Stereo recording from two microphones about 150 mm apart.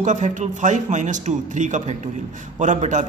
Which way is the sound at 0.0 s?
55° right (ahead or behind).